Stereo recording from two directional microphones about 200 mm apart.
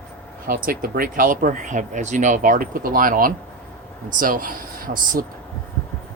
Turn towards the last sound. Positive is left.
turn(degrees=-45)  # may be behind; listen again after turning